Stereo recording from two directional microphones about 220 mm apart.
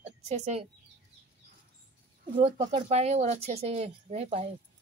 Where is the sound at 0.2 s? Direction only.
30° right (ahead or behind).